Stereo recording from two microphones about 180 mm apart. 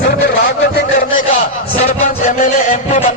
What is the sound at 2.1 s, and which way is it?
Music, 50° left (ahead or behind).